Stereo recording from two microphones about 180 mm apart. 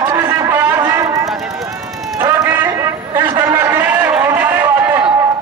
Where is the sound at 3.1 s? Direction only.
25° right (ahead or behind).